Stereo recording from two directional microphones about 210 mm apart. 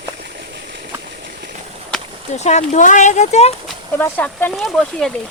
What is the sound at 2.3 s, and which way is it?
Speech, 30° left (ahead or behind).